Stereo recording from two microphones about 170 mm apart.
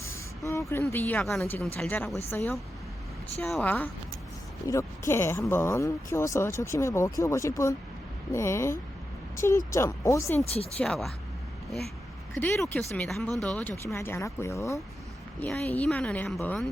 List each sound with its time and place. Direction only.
0.0 s a sound: 15° left (ahead or behind)
0.7 s speech: 15° left (ahead or behind)
10.4 s speech: 35° left (ahead or behind)
10.8 s speech: 5° left (ahead or behind)
12.3 s speech: 10° left (ahead or behind)